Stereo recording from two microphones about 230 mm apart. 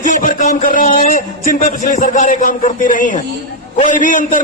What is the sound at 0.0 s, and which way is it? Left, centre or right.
A man's voice, left.